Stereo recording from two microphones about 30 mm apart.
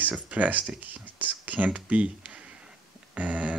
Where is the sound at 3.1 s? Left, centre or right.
Right.